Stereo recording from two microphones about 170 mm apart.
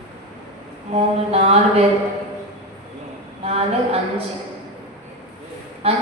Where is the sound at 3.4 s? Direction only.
35° right (ahead or behind).